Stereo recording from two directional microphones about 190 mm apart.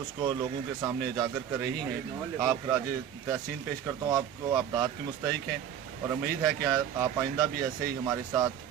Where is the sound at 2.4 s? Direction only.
20° right (ahead or behind).